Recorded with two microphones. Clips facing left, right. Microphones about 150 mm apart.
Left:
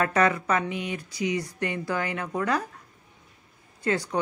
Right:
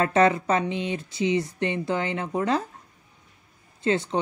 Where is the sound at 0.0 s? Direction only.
25° right (ahead or behind).